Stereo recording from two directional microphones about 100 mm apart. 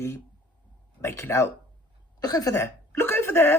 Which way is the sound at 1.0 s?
25° left (ahead or behind).